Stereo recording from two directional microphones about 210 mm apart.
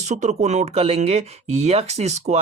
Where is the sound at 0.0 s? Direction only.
35° right (ahead or behind).